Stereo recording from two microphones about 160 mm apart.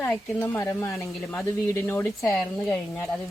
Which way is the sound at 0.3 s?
15° left (ahead or behind).